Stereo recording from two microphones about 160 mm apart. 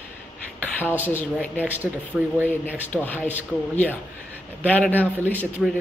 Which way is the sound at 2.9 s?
10° left (ahead or behind).